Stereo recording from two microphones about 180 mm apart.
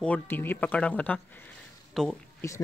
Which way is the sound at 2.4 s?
15° left (ahead or behind).